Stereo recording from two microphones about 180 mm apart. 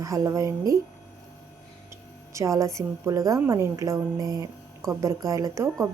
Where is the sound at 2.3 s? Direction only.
15° right (ahead or behind).